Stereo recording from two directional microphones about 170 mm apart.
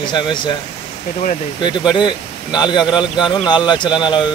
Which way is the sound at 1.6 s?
25° left (ahead or behind).